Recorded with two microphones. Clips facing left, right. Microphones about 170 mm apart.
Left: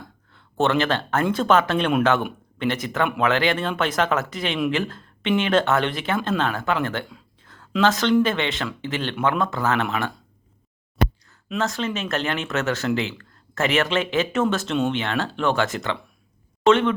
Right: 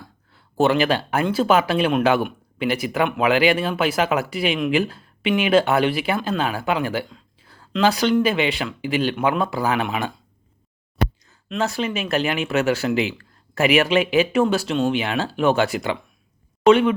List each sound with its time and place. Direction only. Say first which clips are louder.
0.0 s speech: left 1 dB; 10° right (ahead or behind)
7.4 s a sound: even; 10° right (ahead or behind)
7.8 s speech: even; 10° right (ahead or behind)
11.6 s speech: right 2 dB; 15° right (ahead or behind)